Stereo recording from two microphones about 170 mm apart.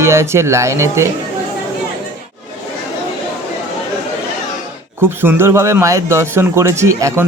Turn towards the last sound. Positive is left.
turn(degrees=-20)  # may be behind; listen again after turning